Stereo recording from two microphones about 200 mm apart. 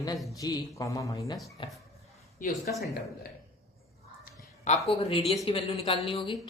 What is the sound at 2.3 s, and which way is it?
Speech, 40° left (ahead or behind).